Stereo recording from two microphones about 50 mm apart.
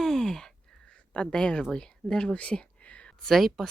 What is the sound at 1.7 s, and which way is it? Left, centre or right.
Speech, centre.